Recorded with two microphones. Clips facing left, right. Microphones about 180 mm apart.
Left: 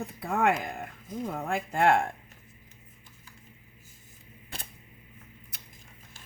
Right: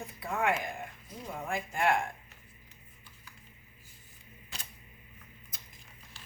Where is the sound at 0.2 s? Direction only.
55° left (ahead or behind).